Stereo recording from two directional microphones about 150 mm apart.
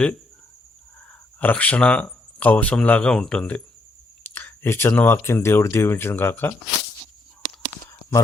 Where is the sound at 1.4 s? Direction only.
10° left (ahead or behind).